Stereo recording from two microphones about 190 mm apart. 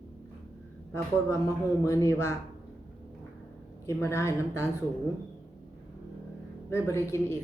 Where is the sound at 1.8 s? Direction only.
15° left (ahead or behind).